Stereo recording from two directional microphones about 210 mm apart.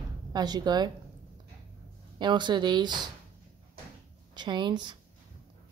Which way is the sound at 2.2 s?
20° right (ahead or behind).